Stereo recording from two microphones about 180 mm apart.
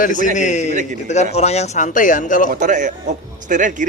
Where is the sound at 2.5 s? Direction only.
45° right (ahead or behind).